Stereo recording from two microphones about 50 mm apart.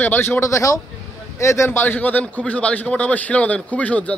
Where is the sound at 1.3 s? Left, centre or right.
Left.